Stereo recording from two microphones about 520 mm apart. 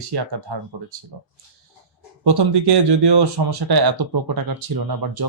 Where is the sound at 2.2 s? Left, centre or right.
Right.